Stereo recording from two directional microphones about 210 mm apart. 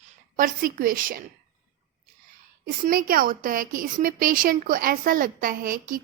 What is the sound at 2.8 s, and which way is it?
Speech, 45° right (ahead or behind).